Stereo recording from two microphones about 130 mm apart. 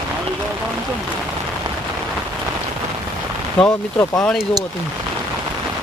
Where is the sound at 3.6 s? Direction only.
20° left (ahead or behind).